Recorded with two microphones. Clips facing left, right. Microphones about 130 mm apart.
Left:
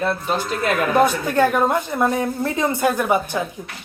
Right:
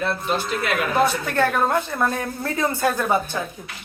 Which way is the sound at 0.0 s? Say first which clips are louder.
Left 2 dB; 45° left (ahead or behind).